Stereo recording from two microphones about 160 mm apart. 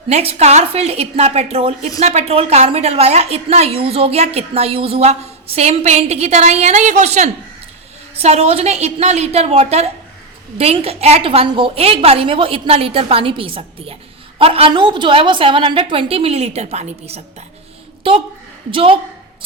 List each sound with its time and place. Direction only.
0.1 s a woman's voice: 40° right (ahead or behind)